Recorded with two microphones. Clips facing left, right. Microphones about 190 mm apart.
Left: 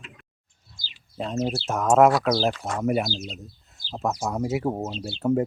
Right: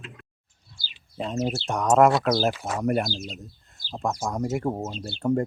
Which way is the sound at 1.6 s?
Centre (ahead or behind).